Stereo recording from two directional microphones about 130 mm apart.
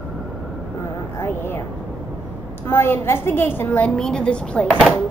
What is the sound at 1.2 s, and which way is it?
Speech, 15° left (ahead or behind).